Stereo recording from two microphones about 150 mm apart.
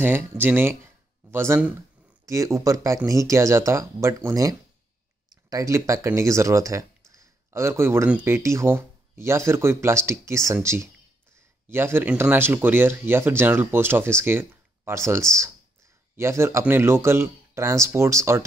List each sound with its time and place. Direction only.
0.0 s speech: 15° right (ahead or behind)
1.3 s a sound: 15° right (ahead or behind)
2.2 s speech: 20° right (ahead or behind)